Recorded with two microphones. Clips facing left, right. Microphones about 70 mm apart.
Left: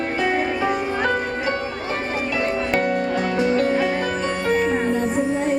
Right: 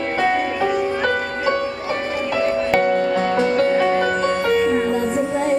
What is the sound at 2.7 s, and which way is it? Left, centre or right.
Music, right.